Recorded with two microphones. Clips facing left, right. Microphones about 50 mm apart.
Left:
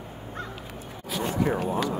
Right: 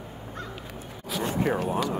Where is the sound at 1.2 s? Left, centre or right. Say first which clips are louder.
Left 1 dB; right.